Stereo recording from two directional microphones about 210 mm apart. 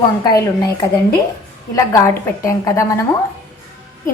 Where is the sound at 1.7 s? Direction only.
15° left (ahead or behind).